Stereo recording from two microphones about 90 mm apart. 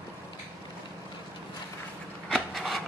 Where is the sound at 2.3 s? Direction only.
Centre (ahead or behind).